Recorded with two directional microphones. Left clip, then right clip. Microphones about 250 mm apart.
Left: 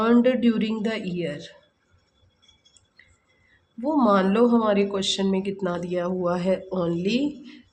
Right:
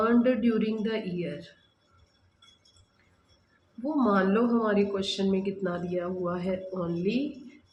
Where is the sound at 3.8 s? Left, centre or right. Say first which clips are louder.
Left 6 dB; left.